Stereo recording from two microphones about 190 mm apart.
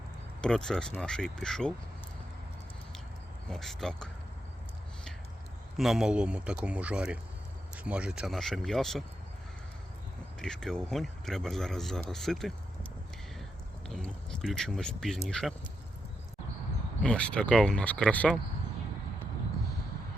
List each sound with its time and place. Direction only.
0.4 s speech: 5° left (ahead or behind)
3.5 s speech: centre (ahead or behind)
5.7 s speech: centre (ahead or behind)
10.4 s speech: 5° left (ahead or behind)
13.8 s speech: 5° left (ahead or behind)
17.0 s speech: 5° left (ahead or behind)